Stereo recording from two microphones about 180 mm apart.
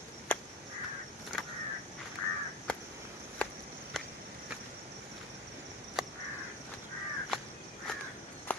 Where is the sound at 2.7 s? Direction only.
5° left (ahead or behind).